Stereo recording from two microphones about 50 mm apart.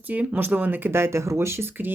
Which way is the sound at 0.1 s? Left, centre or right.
Right.